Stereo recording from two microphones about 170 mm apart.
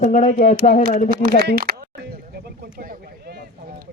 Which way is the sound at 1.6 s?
60° right (ahead or behind).